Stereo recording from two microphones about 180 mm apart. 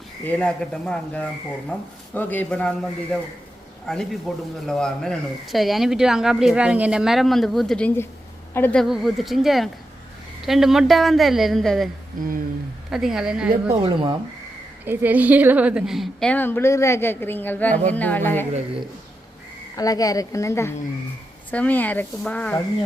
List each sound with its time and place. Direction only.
0.3 s a woman's voice: 5° left (ahead or behind)
12.2 s speech: 50° right (ahead or behind)
12.9 s speech: centre (ahead or behind)
13.8 s speech: 25° right (ahead or behind)
14.8 s a woman's voice: 10° right (ahead or behind); by 18.4 s 10° left (ahead or behind)
19.7 s a woman's voice: 20° left (ahead or behind)